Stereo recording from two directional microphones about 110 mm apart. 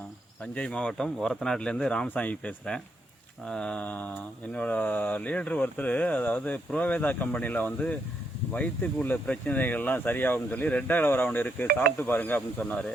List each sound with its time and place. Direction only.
0.5 s speech: 10° left (ahead or behind)